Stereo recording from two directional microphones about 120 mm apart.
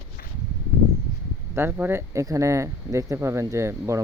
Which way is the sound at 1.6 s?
20° right (ahead or behind).